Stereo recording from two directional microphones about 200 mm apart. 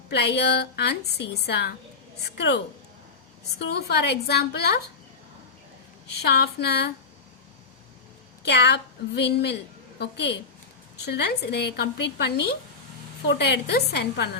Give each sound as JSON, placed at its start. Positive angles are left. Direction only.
{"t": 0.1, "sound": "a woman's voice", "side_deg": 55}
{"t": 3.7, "sound": "a woman's voice", "side_deg": 55}
{"t": 6.2, "sound": "a woman's voice", "side_deg": 55}
{"t": 8.4, "sound": "a woman's voice", "side_deg": 55}